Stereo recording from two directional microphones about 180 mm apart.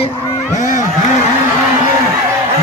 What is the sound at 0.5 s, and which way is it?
Speech, 45° left (ahead or behind).